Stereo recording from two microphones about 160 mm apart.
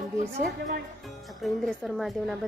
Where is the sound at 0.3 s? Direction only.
90° right.